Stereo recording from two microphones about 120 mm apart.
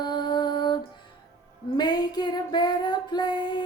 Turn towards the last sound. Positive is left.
turn(degrees=35)  # may be behind; listen again after turning